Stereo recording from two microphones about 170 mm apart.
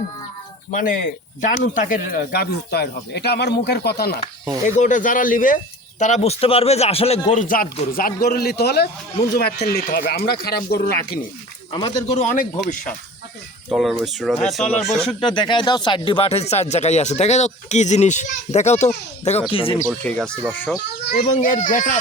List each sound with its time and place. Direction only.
0.7 s speech: 55° left (ahead or behind); by 4.1 s 70° left (ahead or behind)
4.8 s speech: 50° left (ahead or behind); by 11.2 s 65° left (ahead or behind)
11.7 s speech: 30° left (ahead or behind)
12.1 s speech: 45° left (ahead or behind)
13.7 s speech: centre (ahead or behind)
15.0 s speech: 30° left (ahead or behind)
19.9 s speech: 5° left (ahead or behind)
21.0 s speech: 65° left (ahead or behind)
21.2 s speech: 50° left (ahead or behind)